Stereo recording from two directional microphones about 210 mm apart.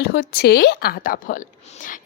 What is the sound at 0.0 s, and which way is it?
A woman's voice, 50° left (ahead or behind).